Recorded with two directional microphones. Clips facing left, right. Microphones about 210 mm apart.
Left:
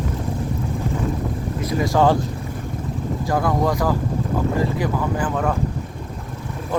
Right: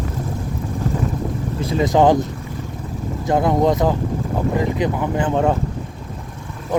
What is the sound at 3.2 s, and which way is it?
Speech, 20° right (ahead or behind).